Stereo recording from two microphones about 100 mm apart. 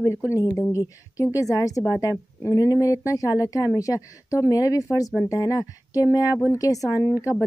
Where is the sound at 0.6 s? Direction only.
30° left (ahead or behind).